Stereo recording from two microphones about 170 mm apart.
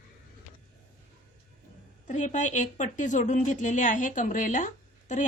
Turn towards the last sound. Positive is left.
turn(degrees=45)  # may be behind; listen again after turning